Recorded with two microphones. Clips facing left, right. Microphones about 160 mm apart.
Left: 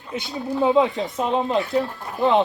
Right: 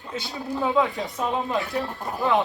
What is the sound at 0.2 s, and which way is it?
Speech, 20° left (ahead or behind).